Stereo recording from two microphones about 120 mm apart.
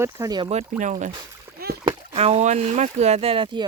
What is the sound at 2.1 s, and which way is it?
Speech, 60° right (ahead or behind).